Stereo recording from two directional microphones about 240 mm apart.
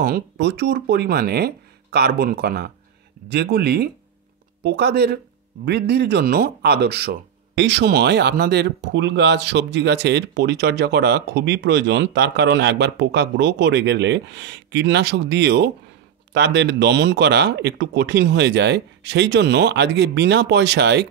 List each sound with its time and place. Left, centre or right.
0.0 s speech: right